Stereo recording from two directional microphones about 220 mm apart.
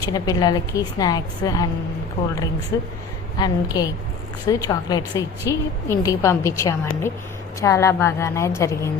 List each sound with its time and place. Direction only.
0.0 s a woman's voice: 15° left (ahead or behind)
2.7 s a woman's voice: 15° left (ahead or behind)